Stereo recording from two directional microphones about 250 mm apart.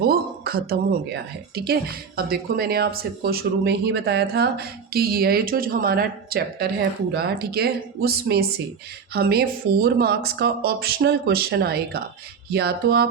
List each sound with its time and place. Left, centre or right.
0.0 s speech: right